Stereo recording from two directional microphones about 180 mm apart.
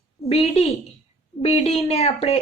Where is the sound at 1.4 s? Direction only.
35° left (ahead or behind).